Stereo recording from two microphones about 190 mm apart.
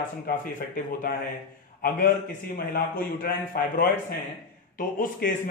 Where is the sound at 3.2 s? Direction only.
50° left (ahead or behind).